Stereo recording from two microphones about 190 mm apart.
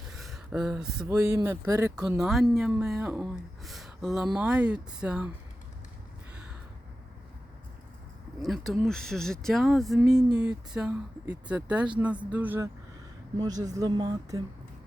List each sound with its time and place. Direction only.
0.2 s a sound: centre (ahead or behind)
1.0 s speech: 15° right (ahead or behind)
2.1 s speech: centre (ahead or behind)
8.4 s speech: centre (ahead or behind); by 14.4 s 20° right (ahead or behind)